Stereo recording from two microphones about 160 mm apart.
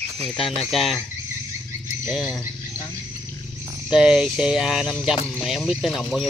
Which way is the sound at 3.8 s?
5° right (ahead or behind).